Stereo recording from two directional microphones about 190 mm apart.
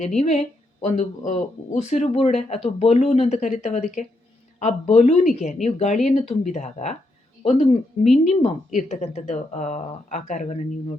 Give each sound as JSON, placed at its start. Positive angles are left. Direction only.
{"t": 0.2, "sound": "speech", "side_deg": 35}
{"t": 8.0, "sound": "speech", "side_deg": 0}
{"t": 8.3, "sound": "speech", "side_deg": 30}